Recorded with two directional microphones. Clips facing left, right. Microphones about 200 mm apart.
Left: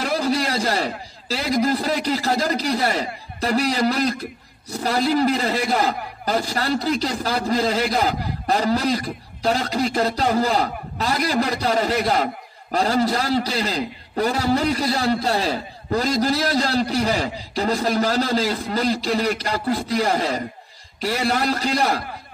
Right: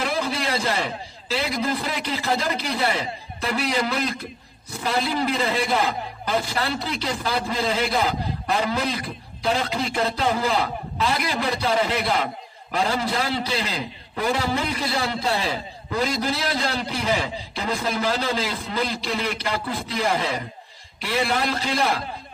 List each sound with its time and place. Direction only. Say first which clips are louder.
0.0 s a man's voice: left 4 dB; 40° left (ahead or behind)